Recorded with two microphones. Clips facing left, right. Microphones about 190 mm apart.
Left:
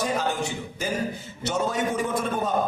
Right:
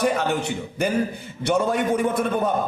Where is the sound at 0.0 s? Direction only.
65° right (ahead or behind).